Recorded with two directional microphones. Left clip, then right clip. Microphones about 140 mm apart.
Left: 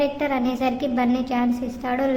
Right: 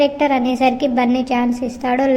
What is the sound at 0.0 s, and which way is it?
A woman's voice, 25° right (ahead or behind).